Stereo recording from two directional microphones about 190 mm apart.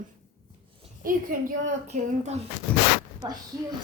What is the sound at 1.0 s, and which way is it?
A woman's voice, 45° right (ahead or behind).